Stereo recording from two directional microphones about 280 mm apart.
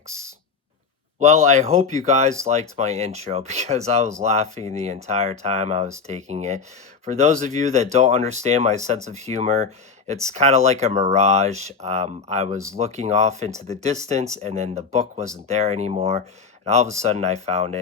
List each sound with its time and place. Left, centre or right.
1.2 s speech: right